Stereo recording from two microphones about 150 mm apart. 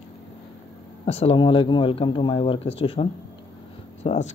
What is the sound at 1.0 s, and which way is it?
Speech, 40° left (ahead or behind).